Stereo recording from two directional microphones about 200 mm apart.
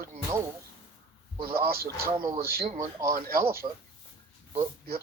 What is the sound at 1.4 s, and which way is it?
Speech, 50° right (ahead or behind).